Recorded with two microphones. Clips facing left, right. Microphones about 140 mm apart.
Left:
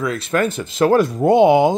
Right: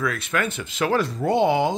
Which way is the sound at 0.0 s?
25° left (ahead or behind).